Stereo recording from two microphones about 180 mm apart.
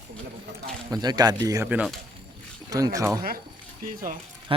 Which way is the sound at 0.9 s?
20° right (ahead or behind).